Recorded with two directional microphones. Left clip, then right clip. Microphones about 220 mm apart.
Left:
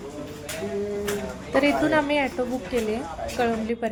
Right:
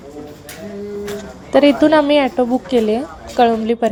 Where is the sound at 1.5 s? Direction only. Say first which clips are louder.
Right 10 dB; 30° right (ahead or behind).